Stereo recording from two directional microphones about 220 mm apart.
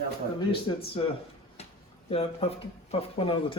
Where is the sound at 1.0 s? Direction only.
20° left (ahead or behind).